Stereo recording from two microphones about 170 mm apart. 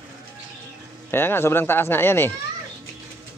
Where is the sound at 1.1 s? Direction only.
15° left (ahead or behind).